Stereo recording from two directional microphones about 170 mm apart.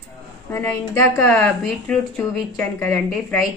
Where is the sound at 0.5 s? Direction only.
10° left (ahead or behind).